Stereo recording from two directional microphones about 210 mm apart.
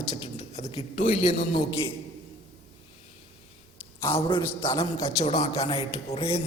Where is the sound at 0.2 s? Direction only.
30° left (ahead or behind).